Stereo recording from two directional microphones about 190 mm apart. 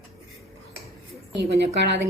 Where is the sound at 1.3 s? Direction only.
65° right (ahead or behind).